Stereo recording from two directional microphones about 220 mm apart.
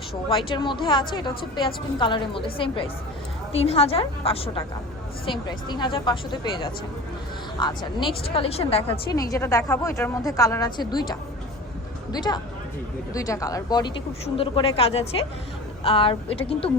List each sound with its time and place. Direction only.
0.3 s a woman's voice: 20° left (ahead or behind)